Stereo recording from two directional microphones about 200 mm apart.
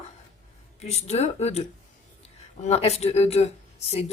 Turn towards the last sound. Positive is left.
turn(degrees=30)  # may be behind; listen again after turning